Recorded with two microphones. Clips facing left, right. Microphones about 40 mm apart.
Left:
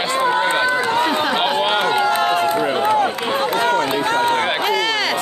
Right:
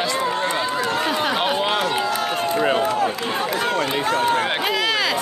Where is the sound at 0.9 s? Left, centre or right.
Left.